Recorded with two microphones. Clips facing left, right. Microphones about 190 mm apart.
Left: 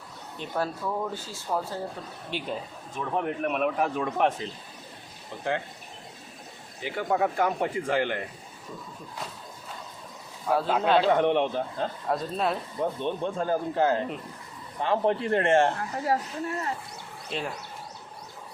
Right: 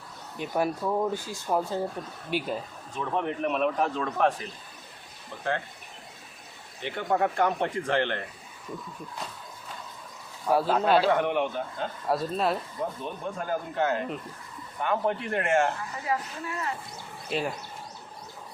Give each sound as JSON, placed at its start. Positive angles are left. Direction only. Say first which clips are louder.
{"t": 0.3, "sound": "speech", "louder": "right 3 dB", "side_deg": -15}
{"t": 2.9, "sound": "a man's voice", "louder": "even", "side_deg": 5}
{"t": 6.8, "sound": "speech", "louder": "even", "side_deg": 5}
{"t": 10.5, "sound": "speech", "louder": "right 1 dB", "side_deg": -10}
{"t": 11.1, "sound": "speech", "louder": "left 3 dB", "side_deg": 25}
{"t": 12.0, "sound": "speech", "louder": "right 2 dB", "side_deg": -5}
{"t": 13.0, "sound": "a man's voice", "louder": "left 5 dB", "side_deg": 30}
{"t": 17.2, "sound": "speech", "louder": "right 3 dB", "side_deg": -5}